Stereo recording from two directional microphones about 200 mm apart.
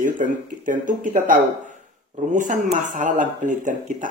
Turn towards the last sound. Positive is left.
turn(degrees=-40)  # may be behind; listen again after turning